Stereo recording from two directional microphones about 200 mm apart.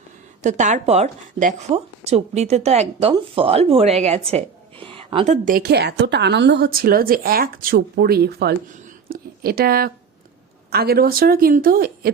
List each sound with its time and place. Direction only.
0.4 s a woman's voice: 35° right (ahead or behind); by 8.5 s 55° right (ahead or behind)
9.0 s a sound: 50° right (ahead or behind)
10.7 s a woman's voice: 50° right (ahead or behind)